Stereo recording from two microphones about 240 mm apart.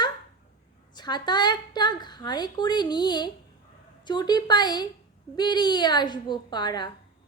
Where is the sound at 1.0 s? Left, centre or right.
Centre.